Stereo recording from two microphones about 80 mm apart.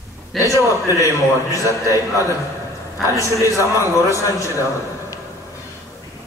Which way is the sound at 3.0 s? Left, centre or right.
Left.